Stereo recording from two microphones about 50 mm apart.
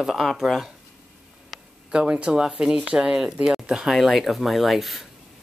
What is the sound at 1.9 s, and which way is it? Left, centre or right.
Speech, centre.